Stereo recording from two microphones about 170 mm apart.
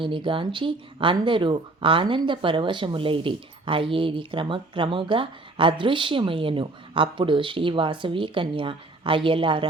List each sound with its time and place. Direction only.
0.0 s speech: 30° right (ahead or behind)